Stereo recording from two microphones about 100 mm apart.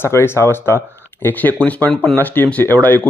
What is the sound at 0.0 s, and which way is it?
Speech, 25° left (ahead or behind).